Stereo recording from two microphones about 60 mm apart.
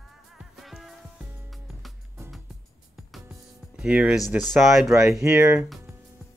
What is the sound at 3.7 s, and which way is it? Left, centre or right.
Speech, centre.